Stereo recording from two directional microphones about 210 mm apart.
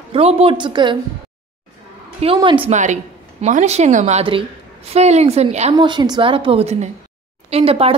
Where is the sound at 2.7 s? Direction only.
35° right (ahead or behind).